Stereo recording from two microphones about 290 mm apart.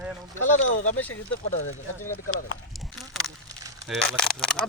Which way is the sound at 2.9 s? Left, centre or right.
Centre.